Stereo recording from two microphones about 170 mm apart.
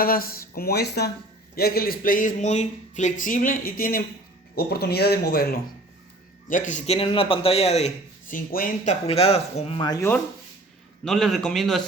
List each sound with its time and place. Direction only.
0.0 s a man's voice: 60° left (ahead or behind)
6.5 s a man's voice: 45° left (ahead or behind)
9.8 s speech: 25° left (ahead or behind)
11.0 s a man's voice: centre (ahead or behind)